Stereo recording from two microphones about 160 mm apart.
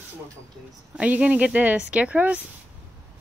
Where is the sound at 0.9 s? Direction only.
10° right (ahead or behind).